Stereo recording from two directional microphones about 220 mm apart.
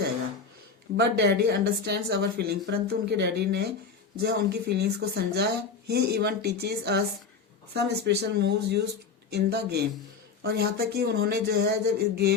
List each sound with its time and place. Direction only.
0.9 s speech: 50° right (ahead or behind)